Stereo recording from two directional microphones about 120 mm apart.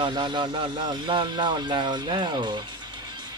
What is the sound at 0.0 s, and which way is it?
Speech, 45° right (ahead or behind).